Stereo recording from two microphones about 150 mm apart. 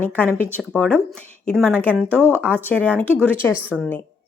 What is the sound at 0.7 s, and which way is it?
A woman's voice, 5° left (ahead or behind).